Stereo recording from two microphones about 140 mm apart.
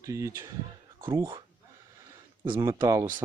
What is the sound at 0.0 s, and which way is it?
Speech, 20° right (ahead or behind).